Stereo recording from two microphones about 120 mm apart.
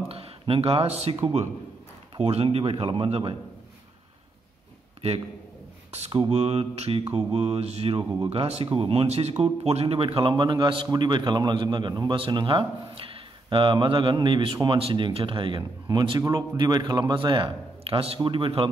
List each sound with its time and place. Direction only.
0.1 s speech: 55° right (ahead or behind)
2.1 s a man's voice: 50° right (ahead or behind)
5.9 s a sound: 65° right (ahead or behind)
6.3 s a man's voice: 55° right (ahead or behind)